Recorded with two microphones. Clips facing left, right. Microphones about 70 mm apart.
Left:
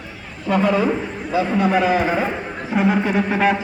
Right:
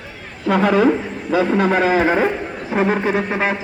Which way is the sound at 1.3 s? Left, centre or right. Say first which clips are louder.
Right 2 dB; right.